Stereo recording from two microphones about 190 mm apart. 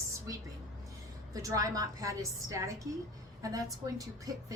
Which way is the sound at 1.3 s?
20° right (ahead or behind).